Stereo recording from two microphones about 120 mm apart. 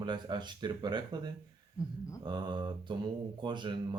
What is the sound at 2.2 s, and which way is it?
Speech, 40° right (ahead or behind).